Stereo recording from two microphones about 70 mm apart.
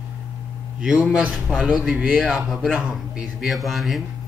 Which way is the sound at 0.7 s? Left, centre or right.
Centre.